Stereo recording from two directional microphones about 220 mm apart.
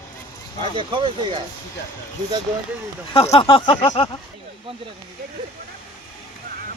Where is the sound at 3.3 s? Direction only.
25° left (ahead or behind).